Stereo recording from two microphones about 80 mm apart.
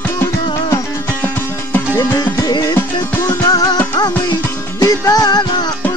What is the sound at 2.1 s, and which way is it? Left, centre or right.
Music, left.